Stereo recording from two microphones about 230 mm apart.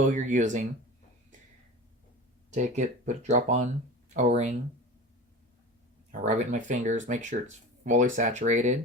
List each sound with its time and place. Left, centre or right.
0.0 s speech: right
2.5 s speech: right
6.1 s speech: right